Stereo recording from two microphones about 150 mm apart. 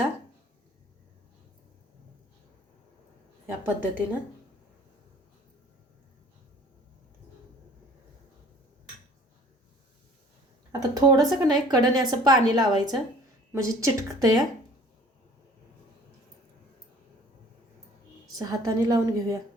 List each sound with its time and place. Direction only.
3.7 s a woman's voice: 10° right (ahead or behind)
10.7 s a woman's voice: 25° right (ahead or behind)
18.3 s a woman's voice: 25° right (ahead or behind)